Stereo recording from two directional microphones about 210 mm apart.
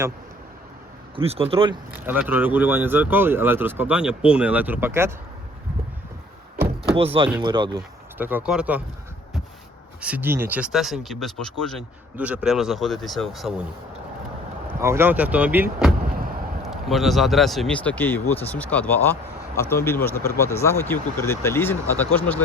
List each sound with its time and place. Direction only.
1.1 s speech: 25° right (ahead or behind)
1.9 s speech: 10° right (ahead or behind)
6.9 s speech: 25° right (ahead or behind)
8.2 s speech: 10° right (ahead or behind)
10.0 s speech: 10° right (ahead or behind)
14.8 s speech: 10° right (ahead or behind); by 22.4 s 10° left (ahead or behind)